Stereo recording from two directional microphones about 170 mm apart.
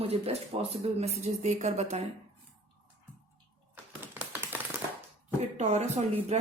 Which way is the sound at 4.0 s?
10° right (ahead or behind).